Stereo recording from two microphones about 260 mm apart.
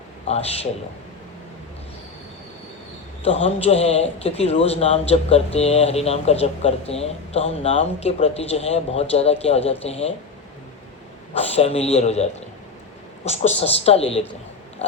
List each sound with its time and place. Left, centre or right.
0.3 s speech: left
3.2 s speech: left
11.3 s speech: left
14.8 s pig: left